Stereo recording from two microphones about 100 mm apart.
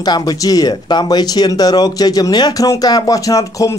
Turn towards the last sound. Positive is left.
turn(degrees=35)  # may be behind; listen again after turning